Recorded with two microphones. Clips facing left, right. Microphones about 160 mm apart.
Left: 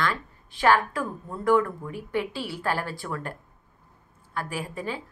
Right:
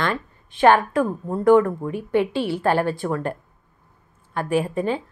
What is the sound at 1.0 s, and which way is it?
Speech, 45° right (ahead or behind).